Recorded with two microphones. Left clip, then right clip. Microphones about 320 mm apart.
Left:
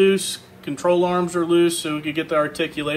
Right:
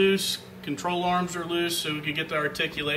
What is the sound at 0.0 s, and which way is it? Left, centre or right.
Speech, centre.